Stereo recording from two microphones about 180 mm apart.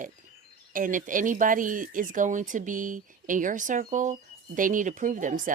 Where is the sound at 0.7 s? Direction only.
45° right (ahead or behind).